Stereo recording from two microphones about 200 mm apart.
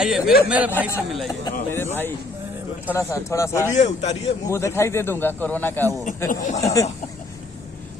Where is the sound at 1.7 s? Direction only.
10° left (ahead or behind).